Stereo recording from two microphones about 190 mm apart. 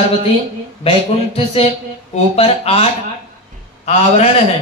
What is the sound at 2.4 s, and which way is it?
Speech, 30° left (ahead or behind).